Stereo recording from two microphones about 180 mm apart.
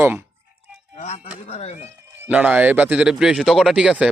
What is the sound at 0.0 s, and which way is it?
Speech, 10° right (ahead or behind).